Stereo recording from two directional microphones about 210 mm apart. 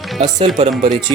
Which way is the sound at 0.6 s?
35° right (ahead or behind).